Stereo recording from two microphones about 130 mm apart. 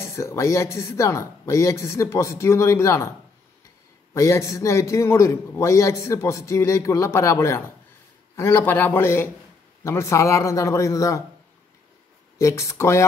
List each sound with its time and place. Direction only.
0.0 s a man's voice: 20° left (ahead or behind)
12.4 s a man's voice: 25° left (ahead or behind)